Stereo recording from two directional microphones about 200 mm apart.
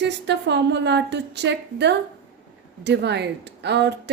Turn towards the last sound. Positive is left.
turn(degrees=-60)  # may be behind; listen again after turning